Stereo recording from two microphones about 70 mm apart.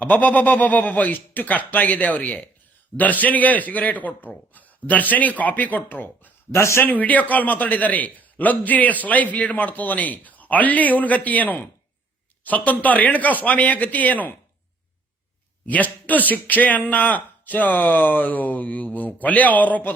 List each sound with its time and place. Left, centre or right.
0.0 s a man's voice: left
6.5 s speech: left
6.8 s a man's voice: left
15.6 s a man's voice: left